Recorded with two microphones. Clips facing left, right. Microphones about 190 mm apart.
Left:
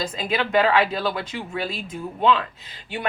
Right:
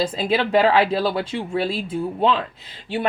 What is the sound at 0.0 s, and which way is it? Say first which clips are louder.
A woman's voice: right 5 dB; 35° right (ahead or behind).